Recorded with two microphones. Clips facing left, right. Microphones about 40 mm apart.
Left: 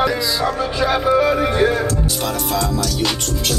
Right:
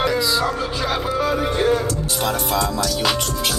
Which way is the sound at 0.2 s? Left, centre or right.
Centre.